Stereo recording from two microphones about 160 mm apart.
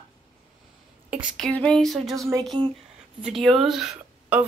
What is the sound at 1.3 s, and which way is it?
Speech, 5° left (ahead or behind).